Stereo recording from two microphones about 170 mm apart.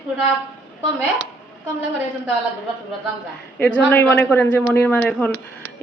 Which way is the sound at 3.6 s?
10° left (ahead or behind).